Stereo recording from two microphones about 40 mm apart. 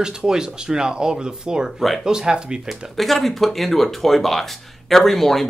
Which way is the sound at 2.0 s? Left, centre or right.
Centre.